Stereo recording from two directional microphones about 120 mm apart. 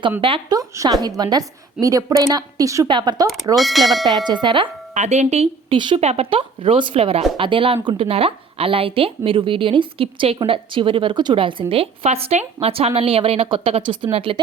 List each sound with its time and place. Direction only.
0.2 s a woman's voice: 45° right (ahead or behind)
0.5 s a woman's voice: 30° right (ahead or behind)
2.8 s a woman's voice: 40° right (ahead or behind)
3.5 s speech: centre (ahead or behind)
4.2 s a woman's voice: 40° right (ahead or behind)
4.9 s speech: 70° right (ahead or behind)
5.7 s a woman's voice: 40° right (ahead or behind)
6.0 s a woman's voice: 60° right (ahead or behind)